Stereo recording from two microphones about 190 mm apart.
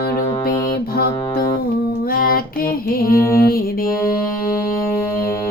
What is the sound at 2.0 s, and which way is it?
Music, 50° left (ahead or behind).